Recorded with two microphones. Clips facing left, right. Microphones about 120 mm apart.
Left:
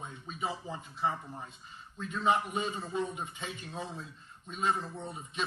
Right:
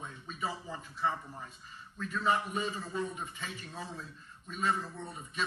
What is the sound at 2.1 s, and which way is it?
A man's voice, 25° left (ahead or behind).